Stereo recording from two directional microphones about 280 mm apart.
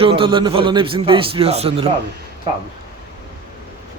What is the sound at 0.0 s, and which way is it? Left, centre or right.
A man's voice, centre.